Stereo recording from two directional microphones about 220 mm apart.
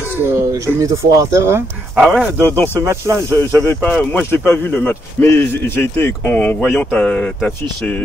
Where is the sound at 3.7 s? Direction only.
5° left (ahead or behind).